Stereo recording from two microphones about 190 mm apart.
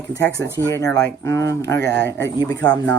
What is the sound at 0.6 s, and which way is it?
Speech, 15° left (ahead or behind).